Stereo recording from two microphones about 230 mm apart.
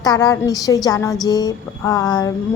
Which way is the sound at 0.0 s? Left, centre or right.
Centre.